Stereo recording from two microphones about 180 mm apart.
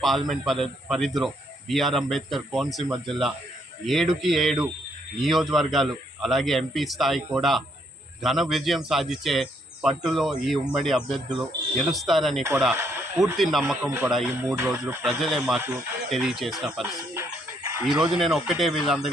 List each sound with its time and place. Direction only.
0.0 s speech: centre (ahead or behind)
12.7 s speech: 15° right (ahead or behind)
13.1 s speech: centre (ahead or behind)
14.3 s speech: 10° right (ahead or behind)
15.0 s speech: centre (ahead or behind)
15.6 s speech: 10° right (ahead or behind)
16.1 s speech: centre (ahead or behind)
17.2 s chicken: 15° right (ahead or behind)
17.8 s speech: 5° right (ahead or behind)